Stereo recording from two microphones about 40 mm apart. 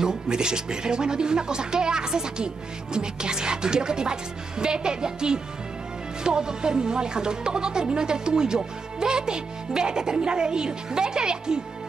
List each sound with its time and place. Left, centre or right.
0.0 s speech: centre